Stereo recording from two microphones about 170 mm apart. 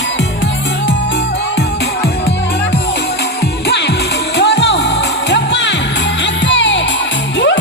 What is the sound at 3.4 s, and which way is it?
Music, 85° left.